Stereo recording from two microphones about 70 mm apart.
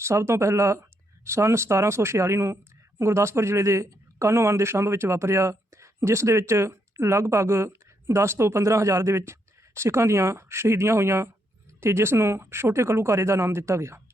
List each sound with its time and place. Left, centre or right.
0.0 s speech: right